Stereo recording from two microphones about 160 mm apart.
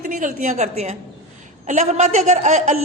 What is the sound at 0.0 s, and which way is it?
A woman's voice, 50° right (ahead or behind).